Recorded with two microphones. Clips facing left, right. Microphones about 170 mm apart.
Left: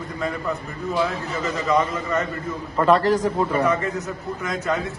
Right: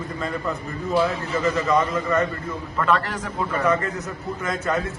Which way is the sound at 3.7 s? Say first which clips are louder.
Even; centre (ahead or behind).